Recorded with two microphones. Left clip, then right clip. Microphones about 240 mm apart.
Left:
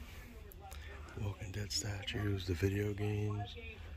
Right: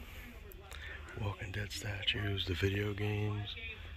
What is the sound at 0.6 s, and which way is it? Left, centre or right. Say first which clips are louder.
Speech: right 5 dB; centre.